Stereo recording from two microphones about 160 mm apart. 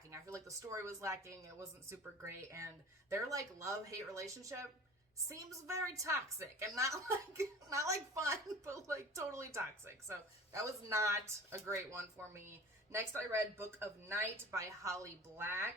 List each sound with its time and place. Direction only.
0.1 s a woman's voice: 20° right (ahead or behind)